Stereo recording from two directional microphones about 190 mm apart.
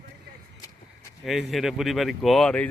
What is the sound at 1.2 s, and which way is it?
Speech, centre (ahead or behind).